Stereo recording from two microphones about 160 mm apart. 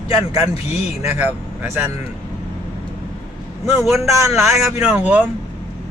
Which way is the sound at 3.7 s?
Centre (ahead or behind).